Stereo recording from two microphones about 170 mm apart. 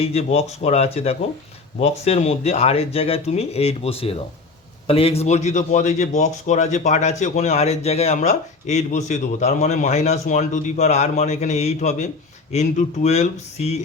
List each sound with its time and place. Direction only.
0.0 s speech: 35° left (ahead or behind)